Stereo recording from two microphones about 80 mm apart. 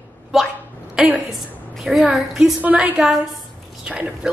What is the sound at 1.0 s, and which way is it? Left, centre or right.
A woman's voice, centre.